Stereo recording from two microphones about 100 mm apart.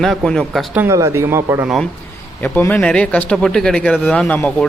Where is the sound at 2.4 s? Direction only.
20° left (ahead or behind).